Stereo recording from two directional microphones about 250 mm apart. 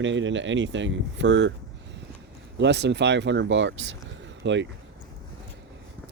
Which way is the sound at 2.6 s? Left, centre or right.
Right.